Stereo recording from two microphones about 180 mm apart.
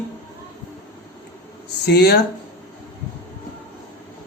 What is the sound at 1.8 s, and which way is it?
Speech, 65° left (ahead or behind).